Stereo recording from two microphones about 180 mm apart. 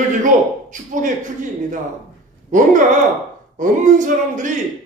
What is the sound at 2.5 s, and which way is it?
A man's voice, 45° right (ahead or behind).